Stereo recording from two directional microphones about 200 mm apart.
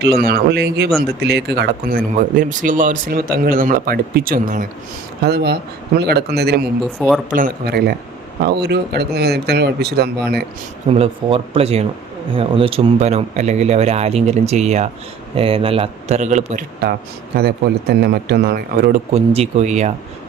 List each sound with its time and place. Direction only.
0.3 s speech: 50° right (ahead or behind)
10.8 s a man's voice: 30° right (ahead or behind)
17.3 s speech: 50° right (ahead or behind)
19.1 s a man's voice: 30° right (ahead or behind)